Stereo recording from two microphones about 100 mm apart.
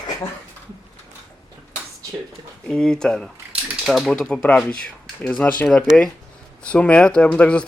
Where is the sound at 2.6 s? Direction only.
5° left (ahead or behind).